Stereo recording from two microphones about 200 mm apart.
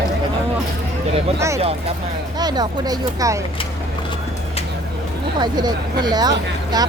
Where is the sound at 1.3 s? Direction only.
15° right (ahead or behind).